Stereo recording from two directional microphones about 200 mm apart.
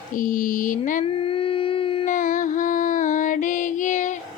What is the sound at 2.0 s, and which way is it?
Music, 40° left (ahead or behind).